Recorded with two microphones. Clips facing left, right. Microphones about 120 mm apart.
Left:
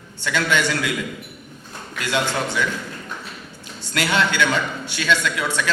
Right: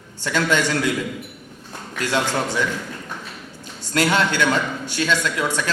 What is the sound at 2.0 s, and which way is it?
Speech, 40° right (ahead or behind).